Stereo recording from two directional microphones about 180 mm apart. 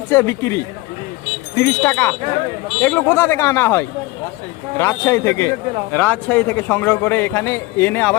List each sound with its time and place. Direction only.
0.1 s a man's voice: 15° left (ahead or behind)